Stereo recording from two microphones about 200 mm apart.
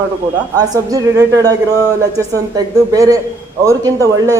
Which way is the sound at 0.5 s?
20° right (ahead or behind).